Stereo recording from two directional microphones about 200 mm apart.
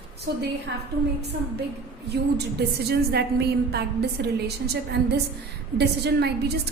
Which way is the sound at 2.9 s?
55° right (ahead or behind).